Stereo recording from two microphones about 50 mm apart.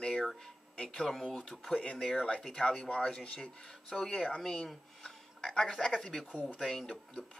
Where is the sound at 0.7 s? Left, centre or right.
Centre.